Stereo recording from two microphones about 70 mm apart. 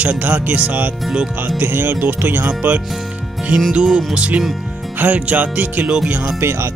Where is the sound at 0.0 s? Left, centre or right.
Right.